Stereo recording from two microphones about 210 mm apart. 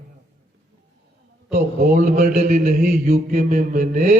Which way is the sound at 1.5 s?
45° right (ahead or behind).